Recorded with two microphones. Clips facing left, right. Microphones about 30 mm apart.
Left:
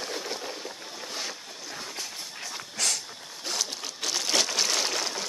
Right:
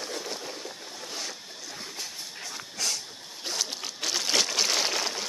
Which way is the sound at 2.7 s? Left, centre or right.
Left.